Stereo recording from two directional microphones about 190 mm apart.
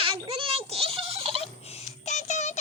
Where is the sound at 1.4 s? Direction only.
35° left (ahead or behind).